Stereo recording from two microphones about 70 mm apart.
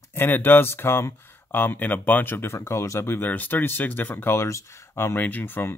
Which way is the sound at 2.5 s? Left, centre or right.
Left.